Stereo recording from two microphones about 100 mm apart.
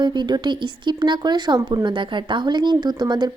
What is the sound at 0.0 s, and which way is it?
Speech, 50° right (ahead or behind).